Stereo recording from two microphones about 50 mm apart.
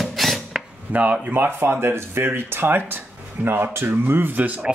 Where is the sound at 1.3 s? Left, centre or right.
Right.